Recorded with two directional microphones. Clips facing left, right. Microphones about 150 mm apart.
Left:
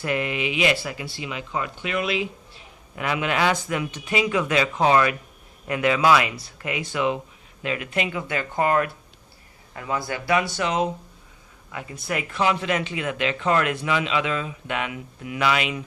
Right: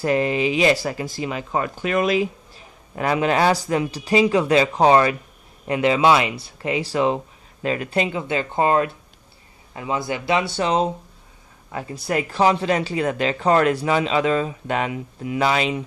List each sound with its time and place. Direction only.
0.0 s speech: 35° right (ahead or behind)